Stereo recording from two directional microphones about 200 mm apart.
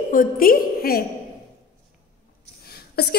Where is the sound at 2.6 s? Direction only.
50° left (ahead or behind).